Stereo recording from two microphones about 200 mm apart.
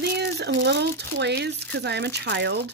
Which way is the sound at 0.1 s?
55° right (ahead or behind).